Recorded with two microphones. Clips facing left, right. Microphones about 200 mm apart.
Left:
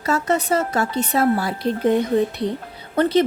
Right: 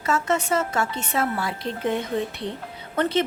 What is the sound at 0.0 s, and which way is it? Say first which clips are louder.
Speech: left 3 dB; 35° left (ahead or behind).